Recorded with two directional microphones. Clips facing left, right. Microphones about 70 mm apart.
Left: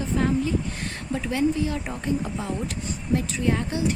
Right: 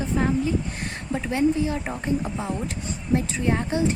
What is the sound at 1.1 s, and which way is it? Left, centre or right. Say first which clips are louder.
Speech: right 2 dB; right.